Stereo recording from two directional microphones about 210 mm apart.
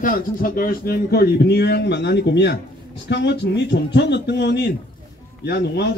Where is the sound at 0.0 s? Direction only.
45° left (ahead or behind).